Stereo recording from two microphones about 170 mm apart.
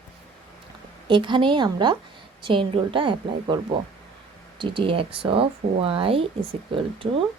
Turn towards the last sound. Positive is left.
turn(degrees=-30)  # may be behind; listen again after turning